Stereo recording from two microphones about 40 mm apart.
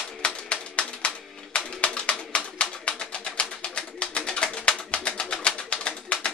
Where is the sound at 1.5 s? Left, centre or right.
Left.